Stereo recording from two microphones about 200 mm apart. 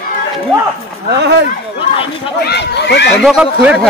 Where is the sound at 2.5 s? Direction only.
55° left (ahead or behind).